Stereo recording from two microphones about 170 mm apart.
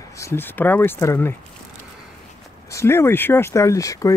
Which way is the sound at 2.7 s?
15° left (ahead or behind).